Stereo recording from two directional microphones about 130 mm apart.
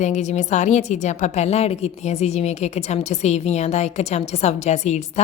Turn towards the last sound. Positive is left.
turn(degrees=60)  # may be behind; listen again after turning